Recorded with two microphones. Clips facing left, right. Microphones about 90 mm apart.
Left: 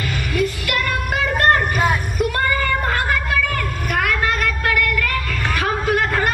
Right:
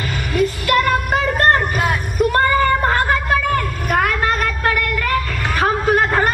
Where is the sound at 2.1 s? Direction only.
35° right (ahead or behind).